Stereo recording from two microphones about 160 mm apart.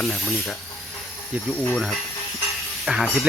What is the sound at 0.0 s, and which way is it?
Speech, centre (ahead or behind).